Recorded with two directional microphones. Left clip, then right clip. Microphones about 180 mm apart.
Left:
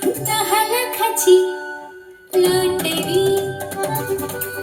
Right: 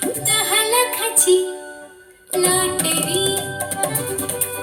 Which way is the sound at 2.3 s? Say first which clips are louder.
Left 3 dB; 30° right (ahead or behind).